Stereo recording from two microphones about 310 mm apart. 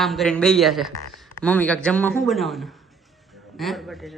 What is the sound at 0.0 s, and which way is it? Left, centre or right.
A man's voice, centre.